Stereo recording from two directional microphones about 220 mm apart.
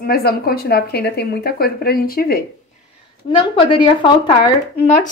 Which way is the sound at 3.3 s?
20° left (ahead or behind).